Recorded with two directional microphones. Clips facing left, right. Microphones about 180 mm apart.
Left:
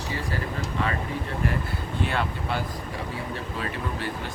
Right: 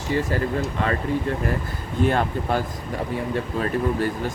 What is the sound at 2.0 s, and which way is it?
Speech, 45° right (ahead or behind).